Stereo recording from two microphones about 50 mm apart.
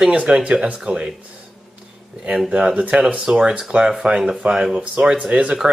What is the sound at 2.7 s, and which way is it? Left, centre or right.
Speech, right.